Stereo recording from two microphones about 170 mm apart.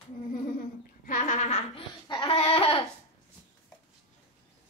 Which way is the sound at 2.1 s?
30° left (ahead or behind).